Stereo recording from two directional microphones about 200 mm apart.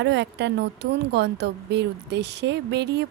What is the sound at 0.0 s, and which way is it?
Speech, 60° right (ahead or behind).